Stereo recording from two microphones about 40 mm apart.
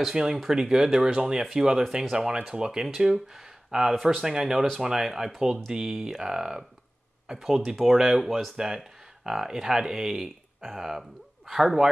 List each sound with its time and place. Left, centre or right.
0.1 s speech: centre
10.2 s speech: centre